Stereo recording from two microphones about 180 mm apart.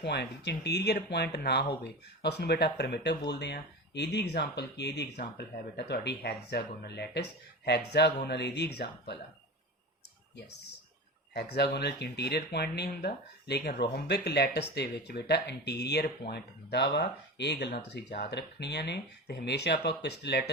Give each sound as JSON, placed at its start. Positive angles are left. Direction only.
{"t": 0.0, "sound": "speech", "side_deg": 70}
{"t": 11.3, "sound": "speech", "side_deg": 65}